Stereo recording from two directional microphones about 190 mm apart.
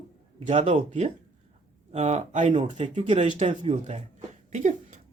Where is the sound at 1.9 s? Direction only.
35° right (ahead or behind).